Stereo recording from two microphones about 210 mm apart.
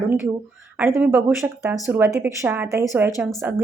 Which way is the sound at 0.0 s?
10° right (ahead or behind).